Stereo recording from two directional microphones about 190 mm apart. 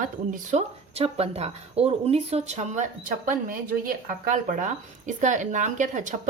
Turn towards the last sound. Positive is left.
turn(degrees=-40)  # may be behind; listen again after turning